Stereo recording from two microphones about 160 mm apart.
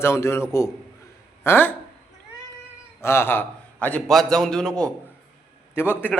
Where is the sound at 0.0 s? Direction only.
15° left (ahead or behind).